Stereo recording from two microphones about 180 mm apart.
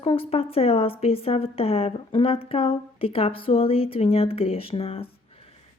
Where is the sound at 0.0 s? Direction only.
30° left (ahead or behind).